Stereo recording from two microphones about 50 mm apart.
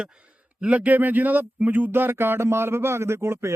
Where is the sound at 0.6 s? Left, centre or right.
Right.